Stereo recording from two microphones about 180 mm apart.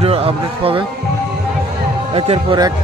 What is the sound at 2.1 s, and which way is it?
Speech, 30° right (ahead or behind).